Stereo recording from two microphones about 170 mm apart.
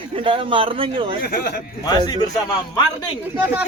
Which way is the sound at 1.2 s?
70° left (ahead or behind).